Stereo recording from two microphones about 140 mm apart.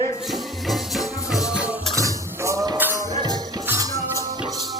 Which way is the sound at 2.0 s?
20° right (ahead or behind).